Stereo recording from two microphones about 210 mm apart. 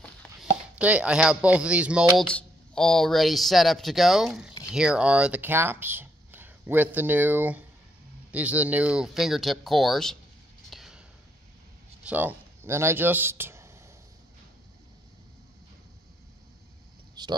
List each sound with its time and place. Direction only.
0.0 s chopping: 5° right (ahead or behind)
2.3 s speech: 5° left (ahead or behind)
10.7 s whispering: centre (ahead or behind)
12.0 s speech: 5° right (ahead or behind)
17.2 s a sound: 20° right (ahead or behind)